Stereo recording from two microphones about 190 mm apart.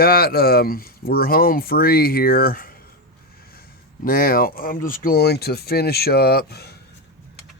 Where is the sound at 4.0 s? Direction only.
50° left (ahead or behind).